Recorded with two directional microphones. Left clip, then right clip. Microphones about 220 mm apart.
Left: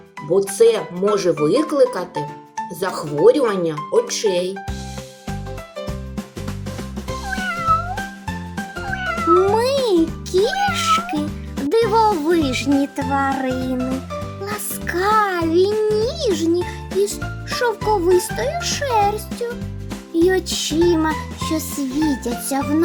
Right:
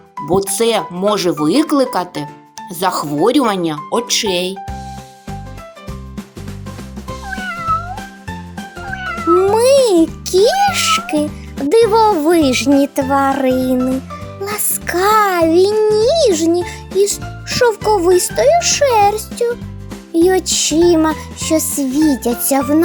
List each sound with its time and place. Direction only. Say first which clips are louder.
0.3 s speech: even; 45° right (ahead or behind)
7.3 s cat: even; centre (ahead or behind)
8.5 s music: even; centre (ahead or behind)
9.5 s music: right 7 dB; 30° right (ahead or behind)
11.7 s a child's voice: right 5 dB; 30° right (ahead or behind)
20.1 s music: right 5 dB; 30° right (ahead or behind)